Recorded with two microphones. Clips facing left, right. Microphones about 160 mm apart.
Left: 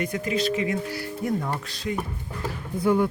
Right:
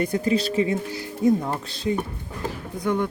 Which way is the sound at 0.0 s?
35° right (ahead or behind).